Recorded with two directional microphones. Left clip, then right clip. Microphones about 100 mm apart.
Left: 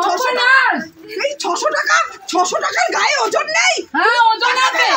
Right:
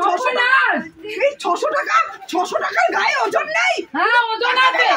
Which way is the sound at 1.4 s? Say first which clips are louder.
Left 2 dB; 20° right (ahead or behind).